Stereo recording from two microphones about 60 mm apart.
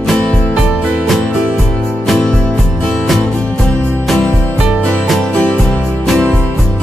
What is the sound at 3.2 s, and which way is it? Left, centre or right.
Music, centre.